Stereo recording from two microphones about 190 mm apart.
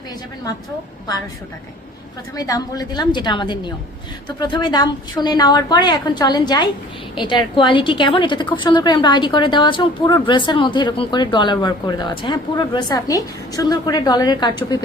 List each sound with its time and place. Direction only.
2.3 s a woman's voice: 20° left (ahead or behind)